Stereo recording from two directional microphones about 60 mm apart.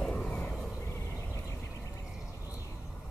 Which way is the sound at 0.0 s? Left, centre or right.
Left.